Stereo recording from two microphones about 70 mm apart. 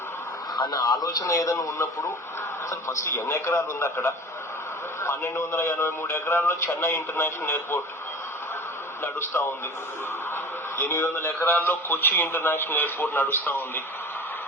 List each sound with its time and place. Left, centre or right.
0.5 s a man's voice: left
5.4 s speech: left
10.8 s a man's voice: left